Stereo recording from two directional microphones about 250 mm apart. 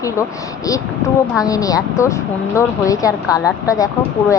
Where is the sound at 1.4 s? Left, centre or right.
Centre.